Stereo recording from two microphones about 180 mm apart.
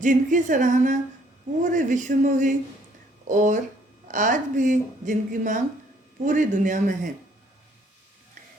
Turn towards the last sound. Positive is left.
turn(degrees=-45)  # may be behind; listen again after turning